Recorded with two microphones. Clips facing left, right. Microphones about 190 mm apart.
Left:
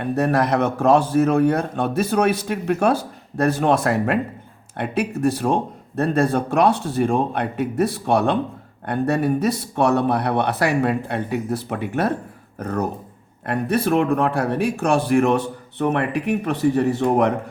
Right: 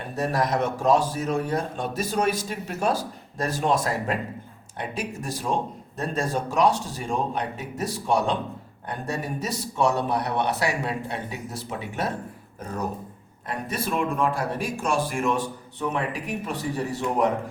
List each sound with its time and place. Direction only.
0.0 s a man's voice: 60° left (ahead or behind)